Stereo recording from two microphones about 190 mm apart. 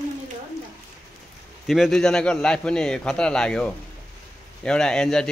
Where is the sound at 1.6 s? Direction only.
Centre (ahead or behind).